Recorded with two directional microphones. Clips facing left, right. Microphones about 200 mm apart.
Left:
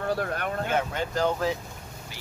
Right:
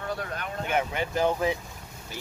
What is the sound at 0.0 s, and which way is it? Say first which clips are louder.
Speech: left 5 dB; 50° left (ahead or behind).